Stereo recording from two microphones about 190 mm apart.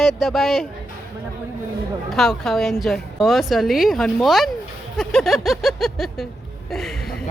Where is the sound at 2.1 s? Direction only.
Centre (ahead or behind).